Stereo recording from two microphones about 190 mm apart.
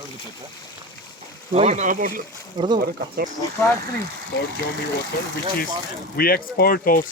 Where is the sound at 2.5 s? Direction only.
25° right (ahead or behind).